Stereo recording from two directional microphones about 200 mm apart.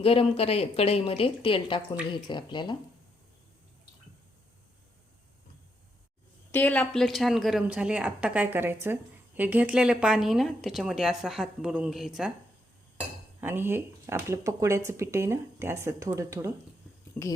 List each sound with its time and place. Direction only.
0.0 s a woman's voice: 30° left (ahead or behind)
6.5 s speech: 10° left (ahead or behind)
13.4 s speech: 10° right (ahead or behind)
17.2 s speech: 10° left (ahead or behind)